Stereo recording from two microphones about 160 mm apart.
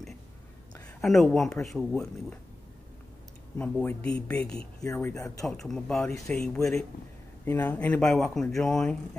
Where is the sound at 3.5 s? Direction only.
15° left (ahead or behind).